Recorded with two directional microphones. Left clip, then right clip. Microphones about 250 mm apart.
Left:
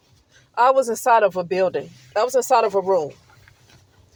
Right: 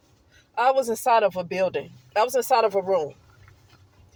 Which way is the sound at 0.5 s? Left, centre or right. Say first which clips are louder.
Left 4 dB; left.